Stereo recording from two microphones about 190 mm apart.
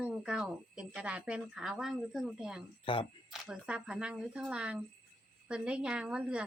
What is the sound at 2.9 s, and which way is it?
Speech, 25° left (ahead or behind).